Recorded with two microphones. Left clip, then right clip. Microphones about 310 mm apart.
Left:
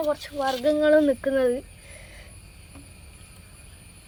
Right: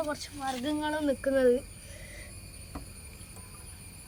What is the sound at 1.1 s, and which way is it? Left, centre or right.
Speech, left.